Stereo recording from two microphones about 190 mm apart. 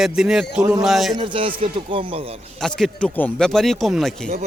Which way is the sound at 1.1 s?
25° right (ahead or behind).